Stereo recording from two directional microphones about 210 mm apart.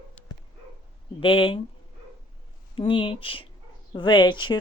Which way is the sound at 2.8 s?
25° left (ahead or behind).